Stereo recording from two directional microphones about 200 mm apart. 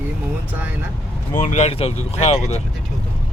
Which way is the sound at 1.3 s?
40° left (ahead or behind).